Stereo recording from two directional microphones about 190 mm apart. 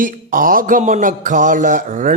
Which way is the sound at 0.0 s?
45° right (ahead or behind).